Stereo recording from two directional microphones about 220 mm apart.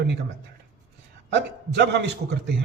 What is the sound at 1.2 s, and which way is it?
A man's voice, 55° right (ahead or behind).